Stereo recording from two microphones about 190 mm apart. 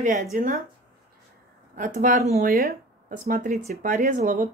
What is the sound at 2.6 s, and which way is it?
A woman's voice, 50° right (ahead or behind).